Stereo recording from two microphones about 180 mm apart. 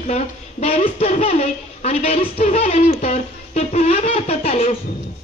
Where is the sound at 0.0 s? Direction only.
35° left (ahead or behind).